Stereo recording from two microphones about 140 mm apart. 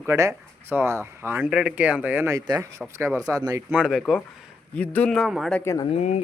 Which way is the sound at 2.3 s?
25° right (ahead or behind).